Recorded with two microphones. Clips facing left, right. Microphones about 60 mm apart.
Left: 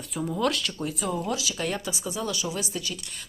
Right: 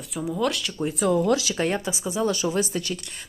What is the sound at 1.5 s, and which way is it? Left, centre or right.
Speech, right.